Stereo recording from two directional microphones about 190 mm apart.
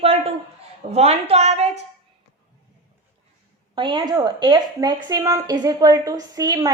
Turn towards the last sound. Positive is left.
turn(degrees=-20)  # may be behind; listen again after turning